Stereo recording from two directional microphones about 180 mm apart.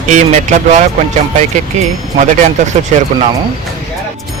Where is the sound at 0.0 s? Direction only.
40° right (ahead or behind).